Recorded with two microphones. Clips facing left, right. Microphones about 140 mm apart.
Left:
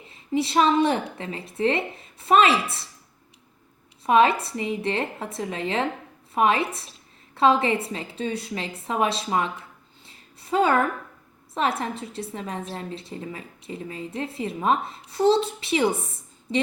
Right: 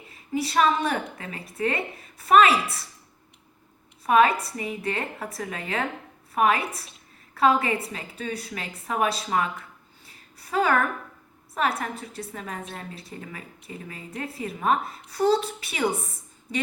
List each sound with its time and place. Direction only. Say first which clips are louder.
0.1 s a woman's voice: left 3 dB; 25° left (ahead or behind)
4.0 s a woman's voice: left 1 dB; 25° left (ahead or behind)
10.1 s a sound: left 6 dB; 25° left (ahead or behind)
11.5 s a woman's voice: left 1 dB; 25° left (ahead or behind)